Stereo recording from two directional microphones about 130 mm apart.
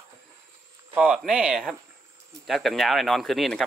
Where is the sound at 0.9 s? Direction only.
5° right (ahead or behind).